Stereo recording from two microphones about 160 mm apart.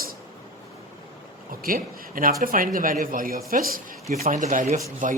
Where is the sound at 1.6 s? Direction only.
60° right (ahead or behind).